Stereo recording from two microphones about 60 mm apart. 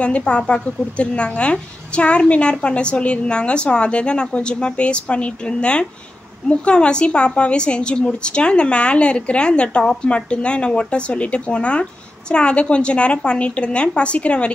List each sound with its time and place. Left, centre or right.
0.0 s a woman's voice: centre